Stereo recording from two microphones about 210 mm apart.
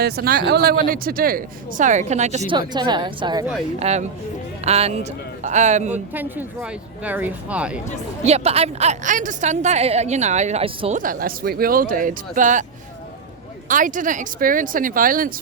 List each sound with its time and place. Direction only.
0.0 s a woman's voice: 45° right (ahead or behind)
2.5 s a woman's voice: 20° right (ahead or behind)
5.9 s speech: 10° right (ahead or behind)
8.2 s a woman's voice: 30° right (ahead or behind)
13.7 s a woman's voice: 40° right (ahead or behind)